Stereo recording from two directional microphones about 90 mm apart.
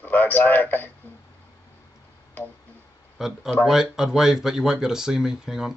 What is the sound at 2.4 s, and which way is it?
Speech, 20° left (ahead or behind).